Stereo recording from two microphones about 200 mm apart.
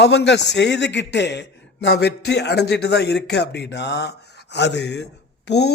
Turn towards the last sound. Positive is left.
turn(degrees=55)  # may be behind; listen again after turning